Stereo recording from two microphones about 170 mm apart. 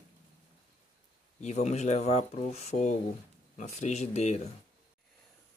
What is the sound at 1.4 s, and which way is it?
Speech, 40° left (ahead or behind).